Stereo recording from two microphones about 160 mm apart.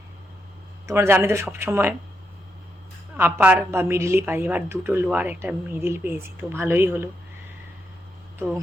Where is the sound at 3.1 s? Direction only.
15° right (ahead or behind).